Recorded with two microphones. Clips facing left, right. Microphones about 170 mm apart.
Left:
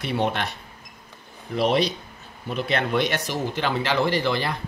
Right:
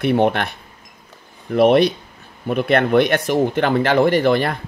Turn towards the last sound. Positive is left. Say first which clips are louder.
# right 8 dB
turn(degrees=-55)  # may be behind; listen again after turning